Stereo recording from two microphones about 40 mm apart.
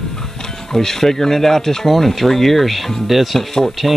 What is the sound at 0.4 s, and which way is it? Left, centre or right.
Speech, centre.